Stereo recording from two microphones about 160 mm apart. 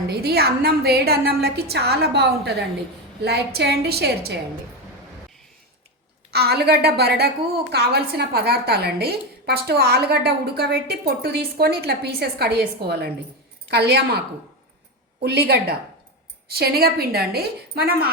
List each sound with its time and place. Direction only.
0.1 s a woman's voice: 85° right
6.3 s a woman's voice: 80° right
7.7 s a woman's voice: 90° right
15.2 s a woman's voice: 90° right